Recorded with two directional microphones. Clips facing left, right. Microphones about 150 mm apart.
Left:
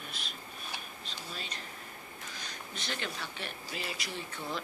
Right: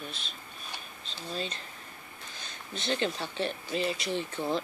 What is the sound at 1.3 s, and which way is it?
Speech, 30° right (ahead or behind).